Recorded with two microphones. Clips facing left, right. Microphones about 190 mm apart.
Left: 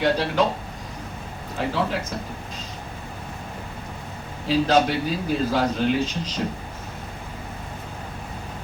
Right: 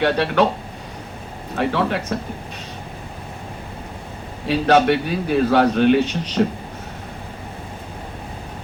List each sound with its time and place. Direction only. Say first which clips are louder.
0.0 s a man's voice: right 3 dB; 65° right (ahead or behind)
1.5 s speech: right 4 dB; 65° right (ahead or behind)
4.4 s a man's voice: right 4 dB; 65° right (ahead or behind)